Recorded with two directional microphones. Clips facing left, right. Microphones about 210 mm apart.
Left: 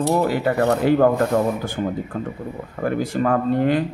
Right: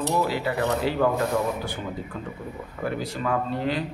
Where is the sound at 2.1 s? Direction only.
50° left (ahead or behind).